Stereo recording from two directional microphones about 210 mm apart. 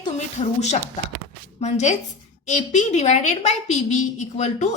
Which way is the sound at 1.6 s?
35° left (ahead or behind).